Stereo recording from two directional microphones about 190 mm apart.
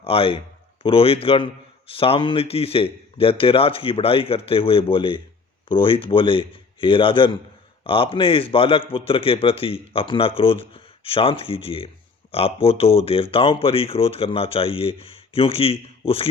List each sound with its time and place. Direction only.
0.0 s a man's voice: 30° left (ahead or behind)